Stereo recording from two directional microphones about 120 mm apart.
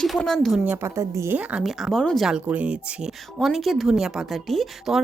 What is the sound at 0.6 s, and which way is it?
Speech, 20° right (ahead or behind).